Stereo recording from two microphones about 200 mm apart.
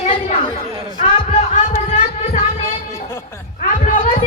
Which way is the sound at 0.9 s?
25° left (ahead or behind).